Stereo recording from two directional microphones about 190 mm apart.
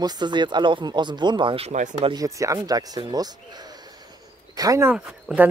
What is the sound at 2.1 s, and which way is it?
Speech, 15° right (ahead or behind).